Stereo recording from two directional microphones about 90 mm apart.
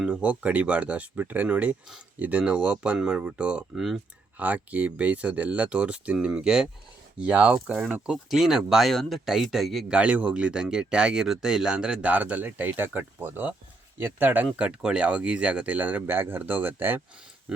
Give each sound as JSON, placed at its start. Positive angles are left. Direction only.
{"t": 0.0, "sound": "speech", "side_deg": -15}
{"t": 4.4, "sound": "speech", "side_deg": -15}
{"t": 9.9, "sound": "speech", "side_deg": -15}